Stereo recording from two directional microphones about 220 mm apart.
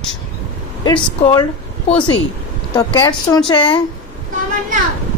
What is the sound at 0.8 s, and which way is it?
A woman's voice, 20° left (ahead or behind).